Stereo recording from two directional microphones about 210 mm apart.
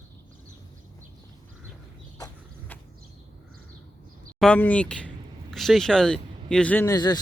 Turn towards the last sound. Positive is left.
turn(degrees=20)  # may be behind; listen again after turning